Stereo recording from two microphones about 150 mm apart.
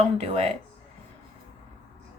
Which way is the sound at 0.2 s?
45° right (ahead or behind).